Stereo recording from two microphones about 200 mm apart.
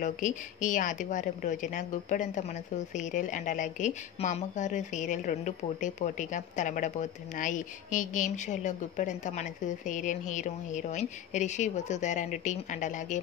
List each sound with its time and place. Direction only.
0.0 s a woman's voice: 40° left (ahead or behind)